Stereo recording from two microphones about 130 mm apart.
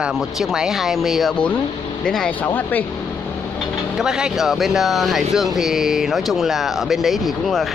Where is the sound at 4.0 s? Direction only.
5° right (ahead or behind).